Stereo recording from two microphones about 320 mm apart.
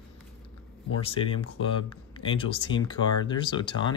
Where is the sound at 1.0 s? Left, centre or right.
Centre.